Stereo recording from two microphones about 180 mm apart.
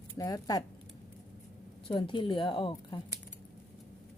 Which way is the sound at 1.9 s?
25° left (ahead or behind).